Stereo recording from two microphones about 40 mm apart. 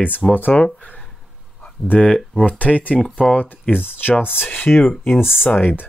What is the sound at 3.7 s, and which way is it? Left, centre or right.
Speech, left.